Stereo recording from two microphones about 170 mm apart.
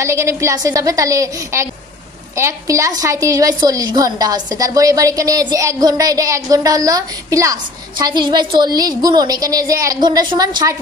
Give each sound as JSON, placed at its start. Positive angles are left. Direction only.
{"t": 0.0, "sound": "a woman's voice", "side_deg": -15}